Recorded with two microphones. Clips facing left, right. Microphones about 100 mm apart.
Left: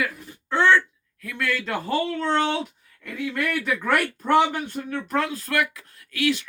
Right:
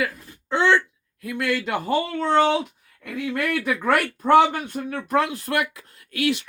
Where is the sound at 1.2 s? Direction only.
20° right (ahead or behind).